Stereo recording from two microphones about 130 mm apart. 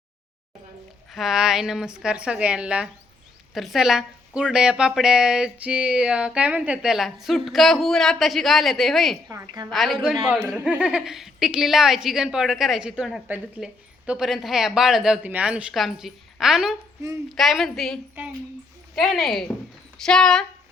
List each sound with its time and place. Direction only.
1.1 s a woman's voice: 5° right (ahead or behind)
14.1 s a woman's voice: centre (ahead or behind)